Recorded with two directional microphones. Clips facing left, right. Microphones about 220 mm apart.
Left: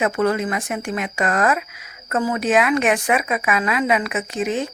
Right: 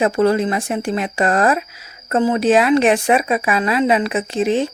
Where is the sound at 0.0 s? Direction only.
30° right (ahead or behind).